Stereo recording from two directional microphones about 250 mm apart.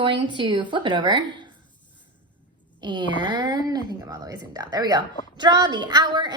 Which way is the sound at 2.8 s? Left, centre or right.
Centre.